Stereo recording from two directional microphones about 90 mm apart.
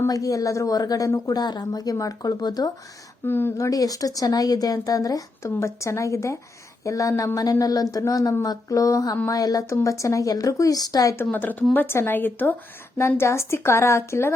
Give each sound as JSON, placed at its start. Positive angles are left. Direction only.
{"t": 0.1, "sound": "speech", "side_deg": 40}
{"t": 3.2, "sound": "speech", "side_deg": 25}
{"t": 3.7, "sound": "speech", "side_deg": 40}
{"t": 11.3, "sound": "speech", "side_deg": 20}